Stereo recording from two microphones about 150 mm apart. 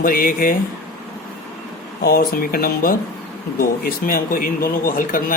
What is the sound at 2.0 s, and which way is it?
Speech, 85° left.